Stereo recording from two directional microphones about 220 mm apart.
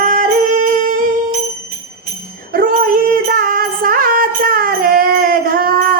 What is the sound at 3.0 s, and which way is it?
Child singing, 40° right (ahead or behind).